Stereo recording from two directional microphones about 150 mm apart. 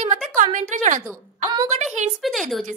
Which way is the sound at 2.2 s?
Centre (ahead or behind).